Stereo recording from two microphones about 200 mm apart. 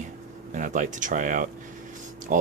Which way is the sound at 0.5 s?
40° right (ahead or behind).